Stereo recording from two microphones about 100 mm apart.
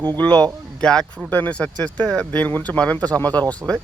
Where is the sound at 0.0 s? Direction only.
15° left (ahead or behind).